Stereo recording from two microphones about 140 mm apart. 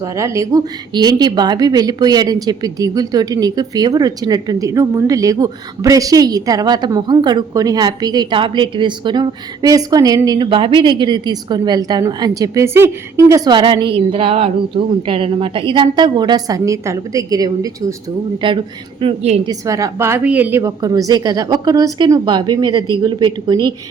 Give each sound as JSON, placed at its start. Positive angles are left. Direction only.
{"t": 0.0, "sound": "a woman's voice", "side_deg": -20}
{"t": 18.4, "sound": "a woman's voice", "side_deg": -35}
{"t": 19.5, "sound": "a woman's voice", "side_deg": -25}